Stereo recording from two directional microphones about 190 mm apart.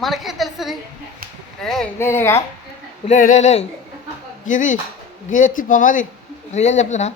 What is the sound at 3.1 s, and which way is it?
Speech, 40° left (ahead or behind).